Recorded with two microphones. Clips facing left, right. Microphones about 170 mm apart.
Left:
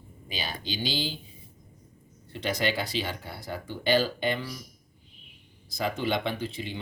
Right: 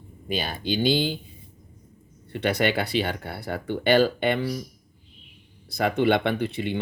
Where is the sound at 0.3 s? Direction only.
55° right (ahead or behind).